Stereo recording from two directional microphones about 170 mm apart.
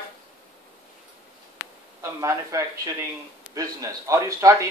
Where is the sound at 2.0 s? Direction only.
20° right (ahead or behind).